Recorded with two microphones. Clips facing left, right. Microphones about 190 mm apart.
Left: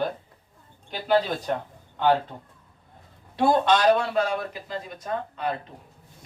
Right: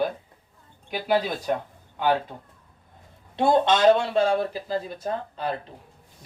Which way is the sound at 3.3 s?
25° right (ahead or behind).